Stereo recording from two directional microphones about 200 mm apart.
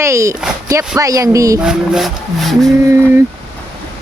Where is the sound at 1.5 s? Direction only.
5° right (ahead or behind).